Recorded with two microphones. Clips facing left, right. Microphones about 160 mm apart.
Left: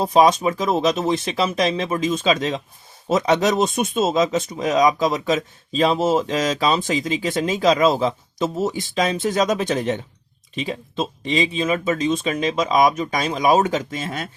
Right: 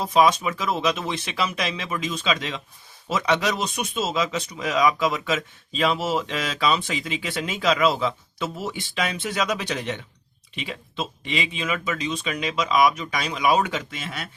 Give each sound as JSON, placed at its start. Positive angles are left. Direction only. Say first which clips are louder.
{"t": 0.1, "sound": "speech", "louder": "left 2 dB", "side_deg": 40}